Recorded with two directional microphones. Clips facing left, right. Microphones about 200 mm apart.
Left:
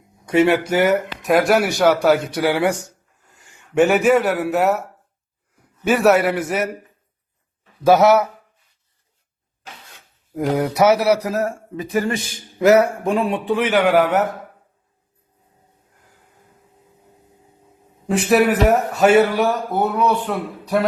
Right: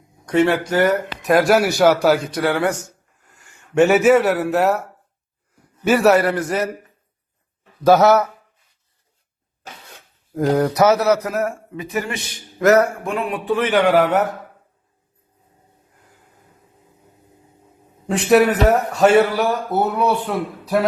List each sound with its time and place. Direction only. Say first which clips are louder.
0.3 s speech: left 1 dB; 10° left (ahead or behind)
0.8 s speech: right 2 dB; 25° left (ahead or behind)
1.2 s speech: right 2 dB; centre (ahead or behind)
3.3 s a sound: left 1 dB; 20° left (ahead or behind)
3.8 s speech: right 2 dB; centre (ahead or behind)
7.9 s speech: even; 10° left (ahead or behind)
10.3 s speech: right 2 dB; 5° left (ahead or behind)
11.3 s speech: even; 35° left (ahead or behind)
12.3 s speech: even; 15° left (ahead or behind)
13.1 s speech: left 4 dB; 30° left (ahead or behind)
13.5 s speech: right 2 dB; 10° left (ahead or behind)
13.8 s speech: right 1 dB; centre (ahead or behind)
18.1 s speech: right 1 dB; centre (ahead or behind)
19.7 s speech: even; 10° right (ahead or behind)